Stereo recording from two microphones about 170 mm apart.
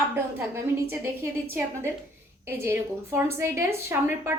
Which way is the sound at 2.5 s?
15° right (ahead or behind).